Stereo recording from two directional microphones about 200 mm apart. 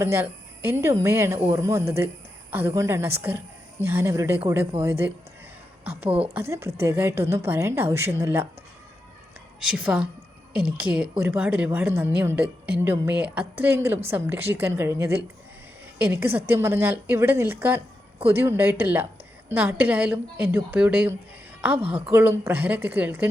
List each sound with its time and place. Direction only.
0.0 s a woman's voice: 10° right (ahead or behind)
6.1 s a woman's voice: 30° right (ahead or behind)
6.3 s speech: 15° right (ahead or behind)
9.6 s a woman's voice: 5° right (ahead or behind)
21.8 s a woman's voice: 25° right (ahead or behind)
22.1 s speech: 10° right (ahead or behind)